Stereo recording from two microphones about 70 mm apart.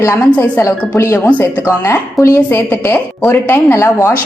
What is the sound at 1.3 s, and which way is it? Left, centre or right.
Speech, left.